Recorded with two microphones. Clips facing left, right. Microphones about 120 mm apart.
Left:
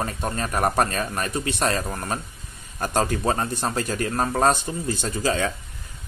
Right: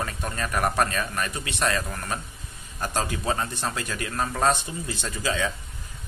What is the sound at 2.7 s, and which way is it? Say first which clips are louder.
Speech: left 5 dB; 45° left (ahead or behind).